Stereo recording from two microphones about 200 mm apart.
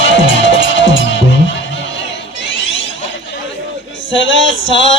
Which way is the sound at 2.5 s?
70° left (ahead or behind).